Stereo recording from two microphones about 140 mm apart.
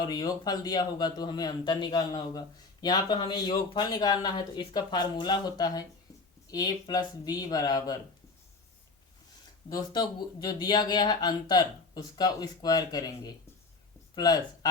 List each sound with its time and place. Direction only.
0.0 s speech: 30° left (ahead or behind)
9.6 s speech: 30° left (ahead or behind)